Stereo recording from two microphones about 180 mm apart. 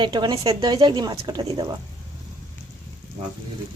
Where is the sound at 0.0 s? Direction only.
25° right (ahead or behind).